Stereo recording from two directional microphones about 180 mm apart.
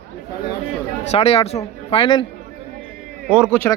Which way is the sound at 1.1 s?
35° left (ahead or behind).